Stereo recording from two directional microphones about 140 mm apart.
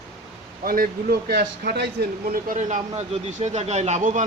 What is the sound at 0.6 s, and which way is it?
Speech, 90° right.